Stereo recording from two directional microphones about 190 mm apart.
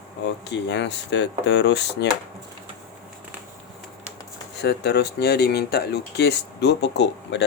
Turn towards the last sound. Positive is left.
turn(degrees=65)  # may be behind; listen again after turning